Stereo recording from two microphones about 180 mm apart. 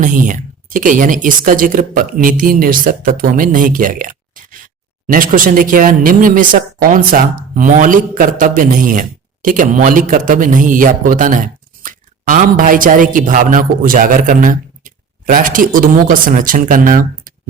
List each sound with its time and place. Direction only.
0.0 s speech: 45° right (ahead or behind)